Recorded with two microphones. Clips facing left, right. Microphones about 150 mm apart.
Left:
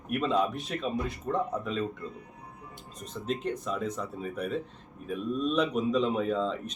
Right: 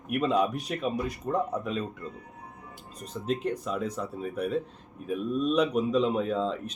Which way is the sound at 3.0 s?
35° right (ahead or behind).